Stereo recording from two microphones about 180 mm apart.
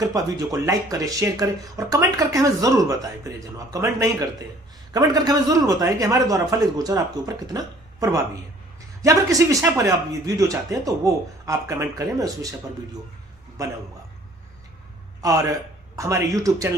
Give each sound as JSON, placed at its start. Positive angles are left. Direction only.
{"t": 0.0, "sound": "speech", "side_deg": -20}
{"t": 15.2, "sound": "a man's voice", "side_deg": -20}